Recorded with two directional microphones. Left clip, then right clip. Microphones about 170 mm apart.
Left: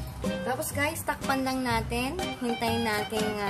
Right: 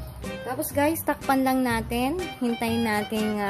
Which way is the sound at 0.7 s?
45° right (ahead or behind).